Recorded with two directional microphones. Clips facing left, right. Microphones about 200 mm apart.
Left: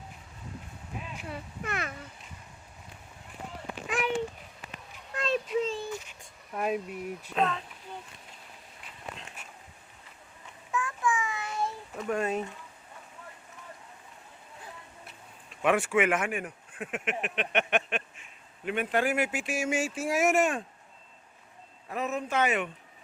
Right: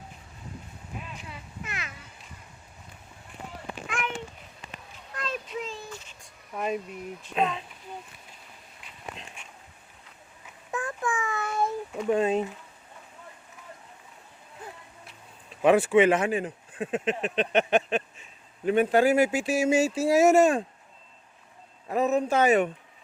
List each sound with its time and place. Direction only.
1.3 s a child's voice: 55° left (ahead or behind)
3.8 s a sound: 35° left (ahead or behind)
5.1 s a sound: 25° left (ahead or behind)
6.5 s speech: 5° left (ahead or behind)
7.3 s speech: 10° right (ahead or behind)
10.7 s child singing: 40° right (ahead or behind); by 11.7 s 55° right (ahead or behind)
12.0 s speech: 20° right (ahead or behind)
15.4 s speech: 35° right (ahead or behind)
21.8 s speech: 40° right (ahead or behind)